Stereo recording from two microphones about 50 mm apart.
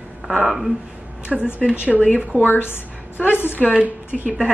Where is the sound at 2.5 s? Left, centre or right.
Left.